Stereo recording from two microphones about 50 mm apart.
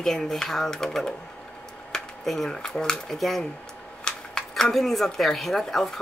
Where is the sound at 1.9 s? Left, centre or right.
Centre.